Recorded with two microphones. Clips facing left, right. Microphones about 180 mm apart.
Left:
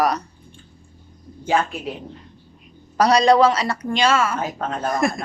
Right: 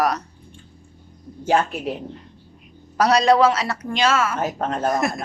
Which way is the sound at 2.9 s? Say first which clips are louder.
Left 1 dB; 5° right (ahead or behind).